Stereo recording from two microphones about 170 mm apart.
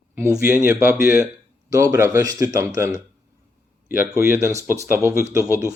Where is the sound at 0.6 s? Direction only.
10° right (ahead or behind).